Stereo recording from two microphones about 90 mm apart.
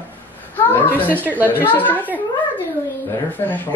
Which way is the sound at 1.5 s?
20° left (ahead or behind).